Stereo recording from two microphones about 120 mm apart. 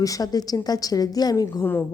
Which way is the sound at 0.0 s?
30° left (ahead or behind).